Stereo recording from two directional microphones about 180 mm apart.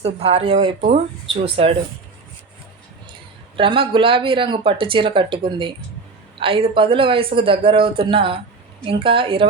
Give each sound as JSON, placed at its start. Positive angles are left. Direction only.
{"t": 0.0, "sound": "speech", "side_deg": -35}
{"t": 3.6, "sound": "speech", "side_deg": -30}